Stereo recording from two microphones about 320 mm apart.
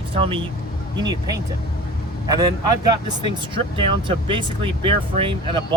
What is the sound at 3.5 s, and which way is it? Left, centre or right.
Speech, centre.